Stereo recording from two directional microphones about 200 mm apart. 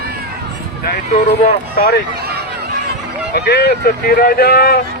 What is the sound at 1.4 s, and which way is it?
Speech, 45° left (ahead or behind).